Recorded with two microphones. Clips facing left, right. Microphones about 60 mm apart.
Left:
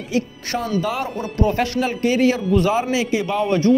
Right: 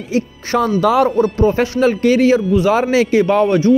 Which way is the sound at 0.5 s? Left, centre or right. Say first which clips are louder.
Right 9 dB; right.